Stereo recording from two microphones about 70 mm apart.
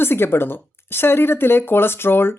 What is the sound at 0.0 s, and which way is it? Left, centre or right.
Speech, left.